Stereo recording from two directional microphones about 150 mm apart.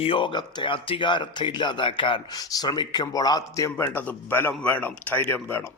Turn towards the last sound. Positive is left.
turn(degrees=15)  # may be behind; listen again after turning